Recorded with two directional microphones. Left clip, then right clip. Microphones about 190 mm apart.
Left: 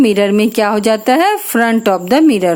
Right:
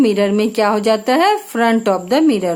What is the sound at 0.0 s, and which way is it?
A woman's voice, 30° left (ahead or behind).